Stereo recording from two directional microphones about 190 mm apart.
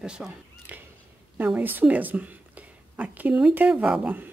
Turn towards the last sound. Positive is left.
turn(degrees=-5)  # may be behind; listen again after turning